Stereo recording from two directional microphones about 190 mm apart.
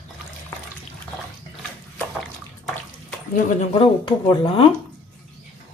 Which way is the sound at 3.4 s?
30° left (ahead or behind).